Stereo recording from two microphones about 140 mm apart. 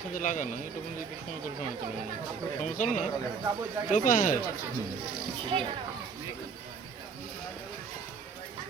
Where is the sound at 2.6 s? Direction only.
65° left (ahead or behind).